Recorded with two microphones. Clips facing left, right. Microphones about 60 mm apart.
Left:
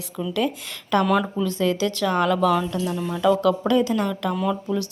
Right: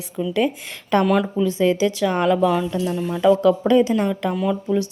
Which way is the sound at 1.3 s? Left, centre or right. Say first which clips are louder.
Right 4 dB; right.